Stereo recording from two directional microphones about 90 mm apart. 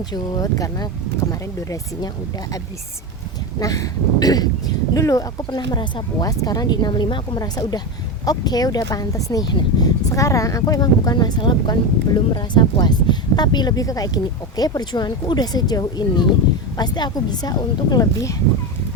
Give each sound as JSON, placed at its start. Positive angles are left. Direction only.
{"t": 0.1, "sound": "speech", "side_deg": 45}
{"t": 3.6, "sound": "speech", "side_deg": 40}
{"t": 7.3, "sound": "speech", "side_deg": 45}